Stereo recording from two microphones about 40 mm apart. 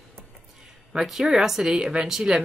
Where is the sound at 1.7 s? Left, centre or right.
Right.